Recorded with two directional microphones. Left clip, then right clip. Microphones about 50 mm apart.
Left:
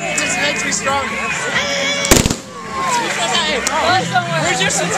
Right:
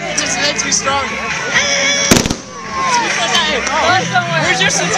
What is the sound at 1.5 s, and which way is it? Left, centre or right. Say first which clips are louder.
Speech: right 6 dB; right.